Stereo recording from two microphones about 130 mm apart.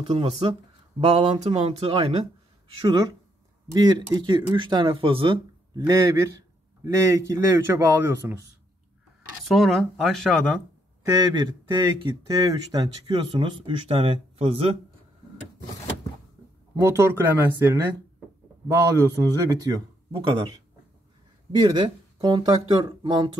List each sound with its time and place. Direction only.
0.0 s speech: 45° right (ahead or behind)
3.7 s speech: 35° right (ahead or behind)
5.8 s speech: 30° right (ahead or behind)
9.4 s speech: centre (ahead or behind)
11.1 s speech: 30° right (ahead or behind); by 14.8 s 50° right (ahead or behind)
16.8 s speech: 20° right (ahead or behind)
18.9 s speech: 25° right (ahead or behind)
21.5 s speech: 35° right (ahead or behind)